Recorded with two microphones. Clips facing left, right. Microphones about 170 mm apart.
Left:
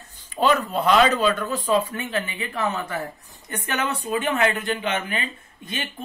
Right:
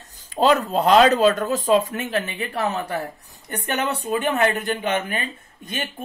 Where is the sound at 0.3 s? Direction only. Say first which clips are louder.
Right 3 dB; 40° right (ahead or behind).